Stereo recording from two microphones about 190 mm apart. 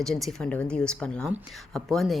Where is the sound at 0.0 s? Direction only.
Centre (ahead or behind).